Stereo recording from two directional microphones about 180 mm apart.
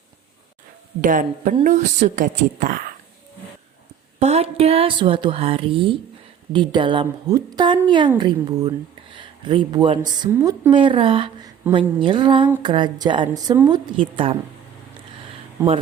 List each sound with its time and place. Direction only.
1.0 s a woman's voice: 50° right (ahead or behind)
4.2 s a woman's voice: 35° right (ahead or behind); by 10.7 s 15° right (ahead or behind)
10.7 s a woman's voice: 30° right (ahead or behind)